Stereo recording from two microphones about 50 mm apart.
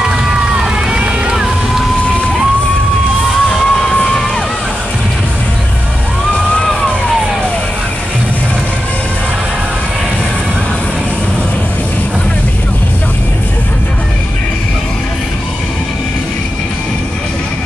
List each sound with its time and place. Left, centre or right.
0.0 s run: centre
3.3 s music: centre
3.6 s music: centre
6.3 s music: centre
6.6 s vehicle: centre